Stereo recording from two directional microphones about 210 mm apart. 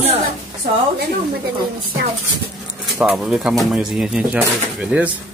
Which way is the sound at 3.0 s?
5° right (ahead or behind).